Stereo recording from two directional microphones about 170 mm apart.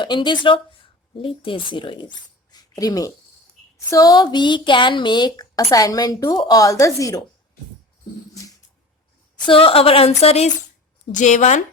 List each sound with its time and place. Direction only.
0.0 s a woman's voice: 25° left (ahead or behind)
9.5 s a woman's voice: 30° left (ahead or behind)